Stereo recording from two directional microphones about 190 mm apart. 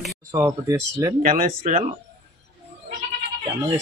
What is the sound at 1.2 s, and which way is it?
Speech, 45° right (ahead or behind).